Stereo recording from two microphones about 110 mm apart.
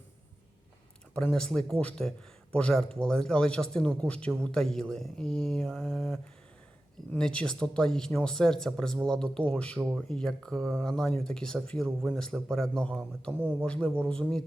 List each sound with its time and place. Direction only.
1.1 s speech: 10° left (ahead or behind)
7.2 s speech: 10° left (ahead or behind)
9.7 s speech: centre (ahead or behind)
13.3 s speech: 15° right (ahead or behind)
13.7 s speech: 10° left (ahead or behind)